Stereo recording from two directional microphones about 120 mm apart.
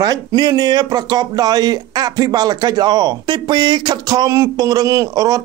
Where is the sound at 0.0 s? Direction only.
30° right (ahead or behind).